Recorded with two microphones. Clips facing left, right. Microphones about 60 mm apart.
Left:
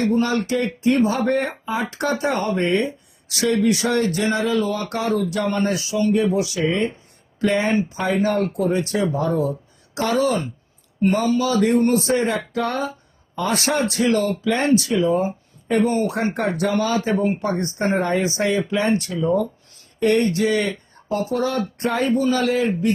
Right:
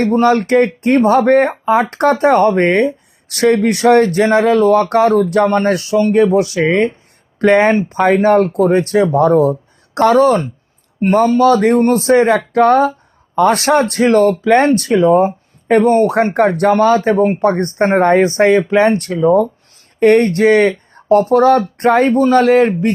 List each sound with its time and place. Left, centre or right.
0.0 s speech: right